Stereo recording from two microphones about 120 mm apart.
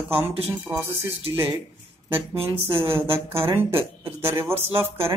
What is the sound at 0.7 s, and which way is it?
Speech, 30° right (ahead or behind).